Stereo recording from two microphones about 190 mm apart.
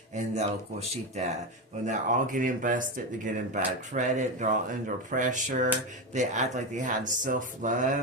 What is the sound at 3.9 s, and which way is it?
Speech, 40° right (ahead or behind).